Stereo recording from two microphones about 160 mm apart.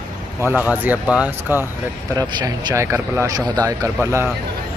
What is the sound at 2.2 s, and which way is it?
A man's voice, 25° right (ahead or behind).